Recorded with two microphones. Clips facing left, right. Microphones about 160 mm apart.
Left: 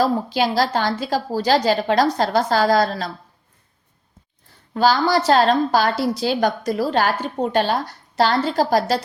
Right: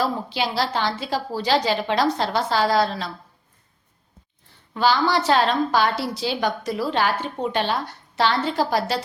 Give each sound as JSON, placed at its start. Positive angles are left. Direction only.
{"t": 0.0, "sound": "a woman's voice", "side_deg": 45}
{"t": 4.7, "sound": "a woman's voice", "side_deg": 40}